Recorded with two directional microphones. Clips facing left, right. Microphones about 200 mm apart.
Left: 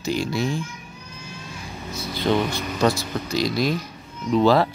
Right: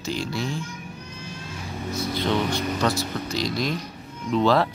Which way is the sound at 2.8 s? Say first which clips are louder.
Left 3 dB; 10° left (ahead or behind).